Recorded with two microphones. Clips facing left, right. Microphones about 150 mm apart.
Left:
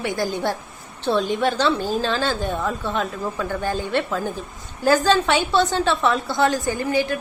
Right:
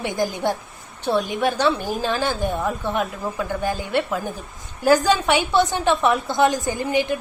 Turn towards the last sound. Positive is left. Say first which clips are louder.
# even
turn(degrees=-20)  # may be behind; listen again after turning